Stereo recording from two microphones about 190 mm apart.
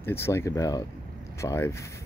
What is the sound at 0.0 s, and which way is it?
Speech, 15° left (ahead or behind).